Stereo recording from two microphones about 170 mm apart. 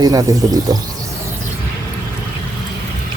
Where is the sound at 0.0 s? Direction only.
20° right (ahead or behind).